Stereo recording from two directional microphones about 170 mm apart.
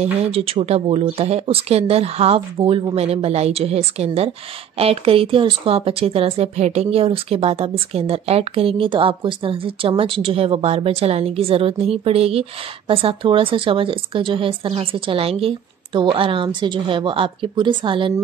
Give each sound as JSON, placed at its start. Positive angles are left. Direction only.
{"t": 0.0, "sound": "a woman's voice", "side_deg": -35}